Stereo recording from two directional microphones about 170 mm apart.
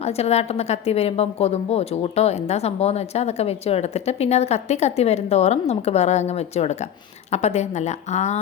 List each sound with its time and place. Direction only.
0.0 s a woman's voice: 40° left (ahead or behind)